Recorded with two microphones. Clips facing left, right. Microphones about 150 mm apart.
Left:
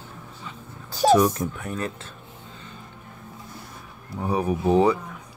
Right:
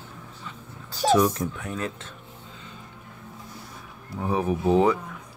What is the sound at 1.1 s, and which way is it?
Speech, 5° left (ahead or behind).